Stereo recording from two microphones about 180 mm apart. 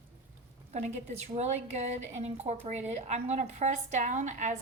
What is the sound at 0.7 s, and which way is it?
A woman's voice, 40° right (ahead or behind).